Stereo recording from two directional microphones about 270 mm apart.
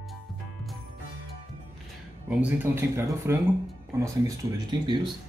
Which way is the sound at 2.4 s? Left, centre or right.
Centre.